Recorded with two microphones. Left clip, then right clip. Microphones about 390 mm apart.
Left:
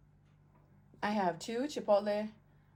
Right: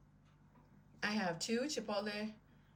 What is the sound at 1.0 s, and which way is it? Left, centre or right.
A woman's voice, centre.